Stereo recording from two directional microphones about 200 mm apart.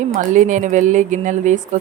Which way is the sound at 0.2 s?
40° right (ahead or behind).